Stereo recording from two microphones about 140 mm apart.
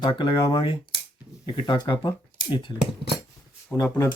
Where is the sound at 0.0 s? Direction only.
35° left (ahead or behind).